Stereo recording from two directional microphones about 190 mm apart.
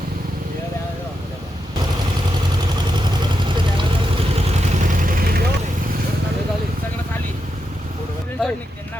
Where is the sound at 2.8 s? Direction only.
25° right (ahead or behind).